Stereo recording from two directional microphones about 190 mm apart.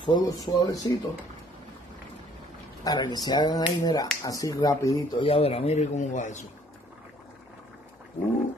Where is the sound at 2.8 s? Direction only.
20° left (ahead or behind); by 6.4 s 40° left (ahead or behind).